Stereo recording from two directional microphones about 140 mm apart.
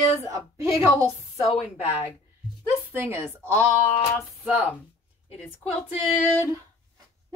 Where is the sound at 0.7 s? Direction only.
20° right (ahead or behind).